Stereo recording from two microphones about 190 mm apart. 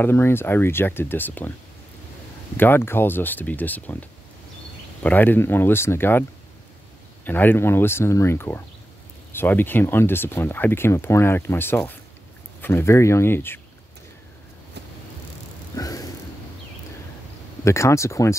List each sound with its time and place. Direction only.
0.0 s speech: 10° left (ahead or behind)
2.5 s speech: 10° left (ahead or behind)
7.2 s speech: 10° left (ahead or behind)
15.7 s a sound: 20° left (ahead or behind)
17.6 s speech: 15° left (ahead or behind)